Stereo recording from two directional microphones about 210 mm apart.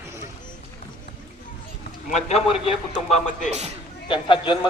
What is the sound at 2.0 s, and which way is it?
A man's voice, 30° left (ahead or behind).